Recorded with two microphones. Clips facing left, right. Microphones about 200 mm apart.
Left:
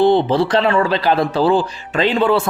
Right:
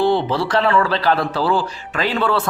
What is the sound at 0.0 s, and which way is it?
Speech, 20° left (ahead or behind).